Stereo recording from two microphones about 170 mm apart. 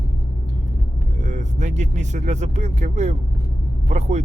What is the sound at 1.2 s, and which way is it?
Speech, 45° right (ahead or behind).